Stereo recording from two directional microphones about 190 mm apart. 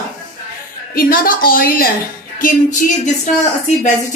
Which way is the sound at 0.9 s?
50° left (ahead or behind).